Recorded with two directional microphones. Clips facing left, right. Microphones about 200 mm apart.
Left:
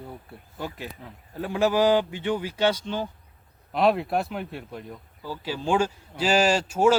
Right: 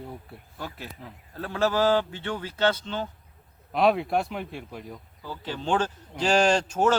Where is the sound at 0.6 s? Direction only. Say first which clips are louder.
Left 4 dB; 15° left (ahead or behind).